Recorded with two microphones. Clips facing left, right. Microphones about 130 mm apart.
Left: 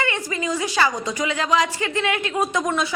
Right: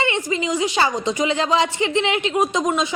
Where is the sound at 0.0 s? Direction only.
20° right (ahead or behind).